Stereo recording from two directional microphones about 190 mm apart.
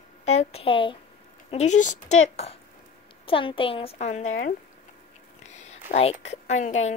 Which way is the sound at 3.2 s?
25° left (ahead or behind).